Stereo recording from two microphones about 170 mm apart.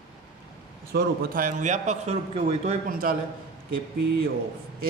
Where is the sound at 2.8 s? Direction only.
55° right (ahead or behind).